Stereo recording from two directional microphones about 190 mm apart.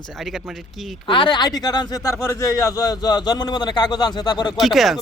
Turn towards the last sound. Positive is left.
turn(degrees=0)  # may be behind; listen again after turning